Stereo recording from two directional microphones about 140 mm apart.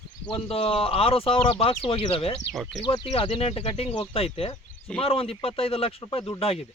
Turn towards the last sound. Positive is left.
turn(degrees=40)  # may be behind; listen again after turning